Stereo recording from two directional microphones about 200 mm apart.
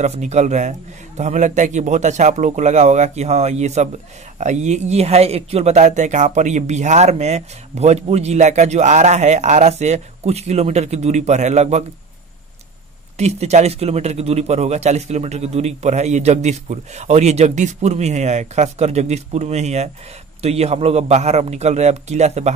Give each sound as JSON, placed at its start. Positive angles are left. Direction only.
{"t": 0.0, "sound": "speech", "side_deg": -35}
{"t": 13.2, "sound": "speech", "side_deg": -35}